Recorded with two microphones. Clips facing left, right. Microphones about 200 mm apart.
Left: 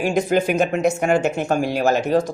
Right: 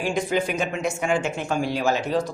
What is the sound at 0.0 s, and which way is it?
Speech, 45° left (ahead or behind).